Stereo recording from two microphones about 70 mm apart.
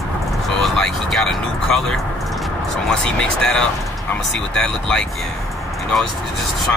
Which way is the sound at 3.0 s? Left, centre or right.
Centre.